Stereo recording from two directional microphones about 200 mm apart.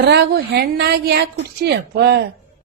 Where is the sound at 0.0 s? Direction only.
55° right (ahead or behind).